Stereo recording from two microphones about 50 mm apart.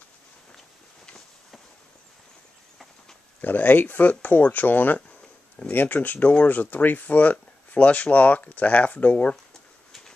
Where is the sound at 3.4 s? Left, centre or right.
Left.